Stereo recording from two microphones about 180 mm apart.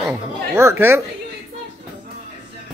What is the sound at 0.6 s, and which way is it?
Speech, 15° right (ahead or behind).